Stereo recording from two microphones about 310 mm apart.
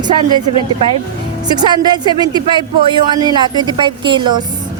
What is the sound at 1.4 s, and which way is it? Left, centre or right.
Speech, centre.